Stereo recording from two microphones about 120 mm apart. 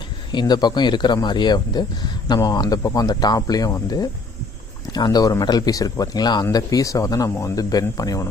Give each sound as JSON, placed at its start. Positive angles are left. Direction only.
{"t": 0.3, "sound": "speech", "side_deg": 40}